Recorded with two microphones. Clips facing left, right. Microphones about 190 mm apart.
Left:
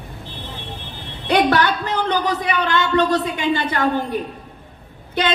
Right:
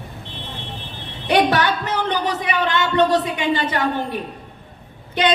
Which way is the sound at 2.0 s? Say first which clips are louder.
Left 4 dB; 20° right (ahead or behind).